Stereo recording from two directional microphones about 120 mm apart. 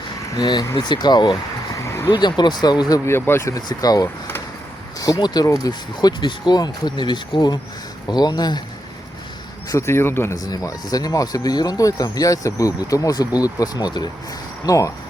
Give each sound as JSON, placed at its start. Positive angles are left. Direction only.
{"t": 0.3, "sound": "speech", "side_deg": 35}
{"t": 1.7, "sound": "a sound", "side_deg": 25}
{"t": 2.0, "sound": "speech", "side_deg": 35}
{"t": 3.1, "sound": "speech", "side_deg": 20}
{"t": 9.6, "sound": "speech", "side_deg": 25}
{"t": 10.3, "sound": "speech", "side_deg": 30}